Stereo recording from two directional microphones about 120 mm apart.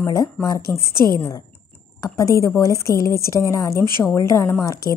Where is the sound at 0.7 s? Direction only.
15° left (ahead or behind).